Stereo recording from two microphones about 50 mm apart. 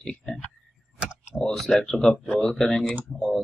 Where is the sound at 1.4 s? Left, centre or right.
Centre.